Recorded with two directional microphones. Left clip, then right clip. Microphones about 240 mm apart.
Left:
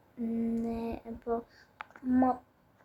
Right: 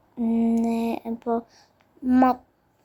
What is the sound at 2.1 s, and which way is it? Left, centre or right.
Speech, right.